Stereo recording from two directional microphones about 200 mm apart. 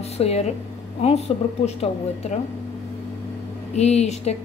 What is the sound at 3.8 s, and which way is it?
Speech, 35° left (ahead or behind).